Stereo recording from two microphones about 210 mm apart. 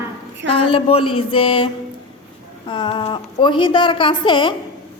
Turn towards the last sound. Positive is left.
turn(degrees=25)  # may be behind; listen again after turning